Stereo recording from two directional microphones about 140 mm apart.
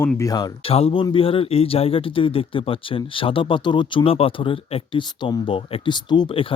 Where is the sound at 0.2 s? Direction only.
25° left (ahead or behind).